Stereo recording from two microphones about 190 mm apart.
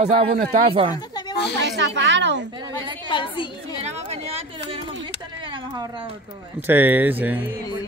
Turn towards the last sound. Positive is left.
turn(degrees=-10)  # may be behind; listen again after turning